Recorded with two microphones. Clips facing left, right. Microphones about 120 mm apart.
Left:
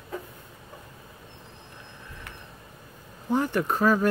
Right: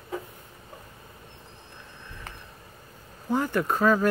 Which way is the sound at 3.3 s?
20° left (ahead or behind).